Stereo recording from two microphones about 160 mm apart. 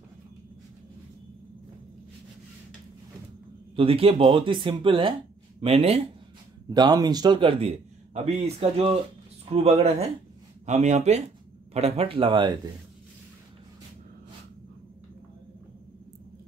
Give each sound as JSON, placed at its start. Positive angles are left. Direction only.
{"t": 3.7, "sound": "speech", "side_deg": -35}
{"t": 6.7, "sound": "speech", "side_deg": -25}